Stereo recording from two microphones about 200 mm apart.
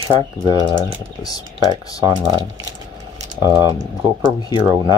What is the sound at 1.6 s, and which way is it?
Speech, 20° right (ahead or behind).